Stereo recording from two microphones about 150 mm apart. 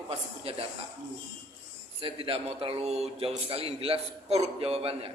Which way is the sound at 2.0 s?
35° right (ahead or behind).